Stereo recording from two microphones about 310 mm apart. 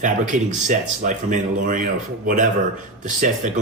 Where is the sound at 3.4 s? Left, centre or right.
Right.